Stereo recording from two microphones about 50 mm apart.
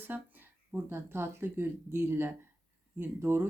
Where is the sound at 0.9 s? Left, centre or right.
Right.